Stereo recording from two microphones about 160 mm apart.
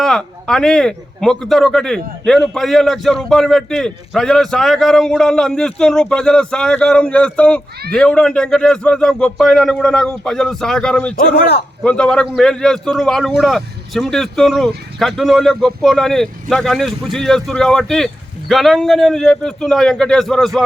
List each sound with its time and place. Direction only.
0.0 s a man's voice: 5° left (ahead or behind)
11.2 s a man's voice: 90° left
11.8 s a man's voice: 5° left (ahead or behind)